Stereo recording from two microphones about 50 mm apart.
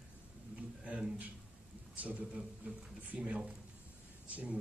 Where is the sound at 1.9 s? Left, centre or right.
Right.